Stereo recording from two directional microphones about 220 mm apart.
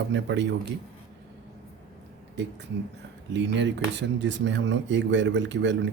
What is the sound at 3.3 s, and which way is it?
A man's voice, 55° right (ahead or behind).